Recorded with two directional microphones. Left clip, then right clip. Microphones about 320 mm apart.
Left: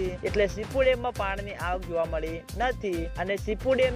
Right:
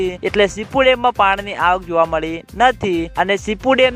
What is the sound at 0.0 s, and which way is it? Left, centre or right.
Speech, right.